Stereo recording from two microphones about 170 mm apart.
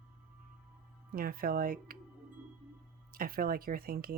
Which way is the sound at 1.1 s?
60° right (ahead or behind).